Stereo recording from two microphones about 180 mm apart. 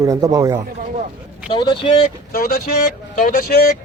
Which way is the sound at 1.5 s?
25° left (ahead or behind).